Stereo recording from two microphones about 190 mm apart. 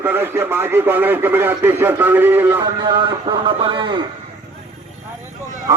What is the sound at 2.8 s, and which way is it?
Speech, 25° right (ahead or behind).